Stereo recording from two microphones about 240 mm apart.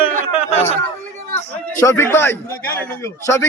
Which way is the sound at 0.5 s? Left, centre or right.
Left.